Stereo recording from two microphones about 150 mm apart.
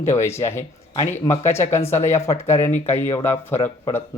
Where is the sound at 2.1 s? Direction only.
20° left (ahead or behind).